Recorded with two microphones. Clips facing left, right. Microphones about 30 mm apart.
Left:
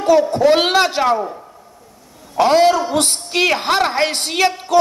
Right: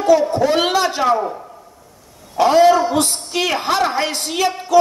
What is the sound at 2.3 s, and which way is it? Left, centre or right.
A man's voice, left.